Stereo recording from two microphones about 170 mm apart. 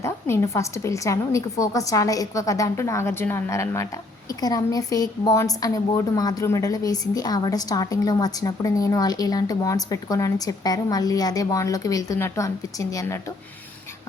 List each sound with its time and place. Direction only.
0.0 s a woman's voice: 15° left (ahead or behind)